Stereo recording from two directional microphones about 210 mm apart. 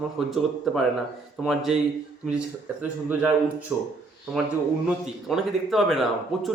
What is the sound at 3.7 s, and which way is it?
Speech, 5° right (ahead or behind).